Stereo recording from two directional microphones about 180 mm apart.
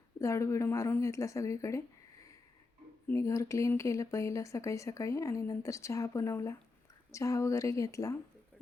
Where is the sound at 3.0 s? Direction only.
15° left (ahead or behind).